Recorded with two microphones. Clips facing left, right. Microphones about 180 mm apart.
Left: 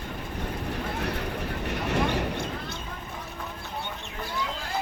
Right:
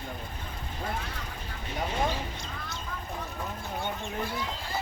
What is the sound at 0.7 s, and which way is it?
Vehicle, 70° left (ahead or behind).